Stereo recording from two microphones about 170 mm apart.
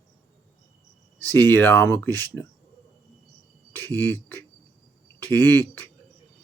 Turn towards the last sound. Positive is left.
turn(degrees=10)  # may be behind; listen again after turning